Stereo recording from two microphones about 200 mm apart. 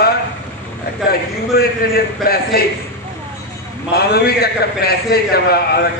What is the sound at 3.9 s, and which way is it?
A man's voice, 55° left (ahead or behind).